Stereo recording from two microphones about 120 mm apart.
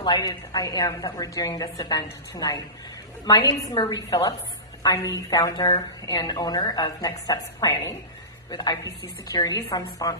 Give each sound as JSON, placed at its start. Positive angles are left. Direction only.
{"t": 0.0, "sound": "a woman's voice", "side_deg": 35}